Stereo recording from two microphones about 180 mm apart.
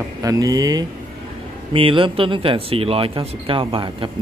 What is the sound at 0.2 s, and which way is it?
A man's voice, 20° right (ahead or behind).